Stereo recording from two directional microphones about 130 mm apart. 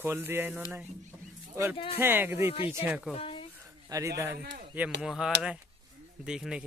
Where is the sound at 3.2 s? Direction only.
45° left (ahead or behind).